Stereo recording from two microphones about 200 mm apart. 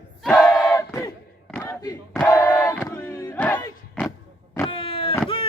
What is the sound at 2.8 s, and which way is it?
Battle cry, 10° left (ahead or behind).